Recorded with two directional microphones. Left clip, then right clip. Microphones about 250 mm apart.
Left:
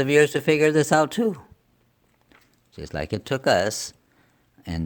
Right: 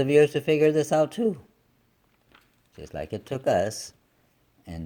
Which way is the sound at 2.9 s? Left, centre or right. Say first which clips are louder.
Left 5 dB; left.